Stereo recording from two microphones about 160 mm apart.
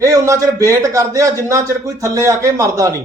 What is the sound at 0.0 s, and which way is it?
A man's voice, 20° right (ahead or behind).